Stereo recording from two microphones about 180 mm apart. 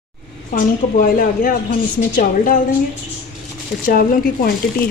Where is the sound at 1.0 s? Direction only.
50° left (ahead or behind).